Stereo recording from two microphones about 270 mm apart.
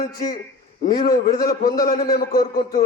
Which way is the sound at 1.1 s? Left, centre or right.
Left.